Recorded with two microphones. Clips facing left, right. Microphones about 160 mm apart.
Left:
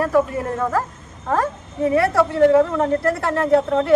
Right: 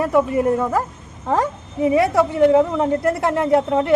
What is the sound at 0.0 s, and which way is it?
A woman's voice, 20° right (ahead or behind).